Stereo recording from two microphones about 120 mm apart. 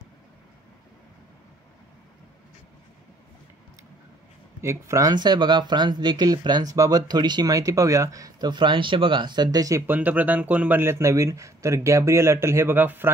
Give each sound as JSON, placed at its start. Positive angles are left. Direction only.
{"t": 4.6, "sound": "speech", "side_deg": -25}
{"t": 9.8, "sound": "speech", "side_deg": -15}